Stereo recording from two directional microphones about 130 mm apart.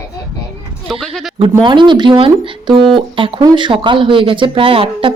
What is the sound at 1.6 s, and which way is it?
Speech, 35° right (ahead or behind).